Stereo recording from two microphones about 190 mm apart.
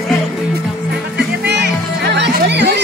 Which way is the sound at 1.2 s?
60° right (ahead or behind).